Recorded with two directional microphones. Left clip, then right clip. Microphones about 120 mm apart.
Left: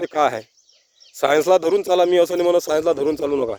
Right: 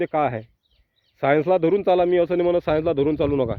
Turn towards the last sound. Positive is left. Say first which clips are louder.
# left 1 dB
turn(degrees=20)  # may be behind; listen again after turning